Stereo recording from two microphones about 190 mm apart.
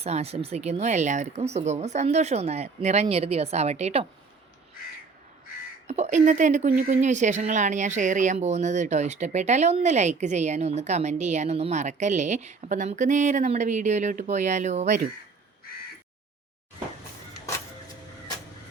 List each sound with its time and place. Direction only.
0.0 s speech: 35° right (ahead or behind)
5.9 s speech: 40° right (ahead or behind)